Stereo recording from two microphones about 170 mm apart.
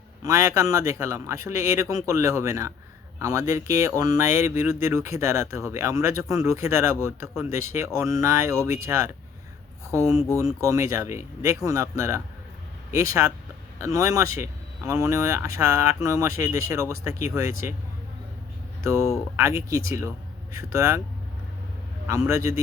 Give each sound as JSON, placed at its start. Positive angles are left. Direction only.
{"t": 0.2, "sound": "a man's voice", "side_deg": -20}
{"t": 19.4, "sound": "speech", "side_deg": -20}
{"t": 22.3, "sound": "speech", "side_deg": -20}